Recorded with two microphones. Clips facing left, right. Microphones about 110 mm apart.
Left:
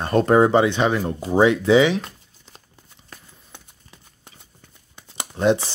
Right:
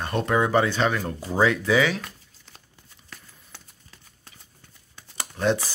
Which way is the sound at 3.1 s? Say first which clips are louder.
Left 2 dB; 20° left (ahead or behind).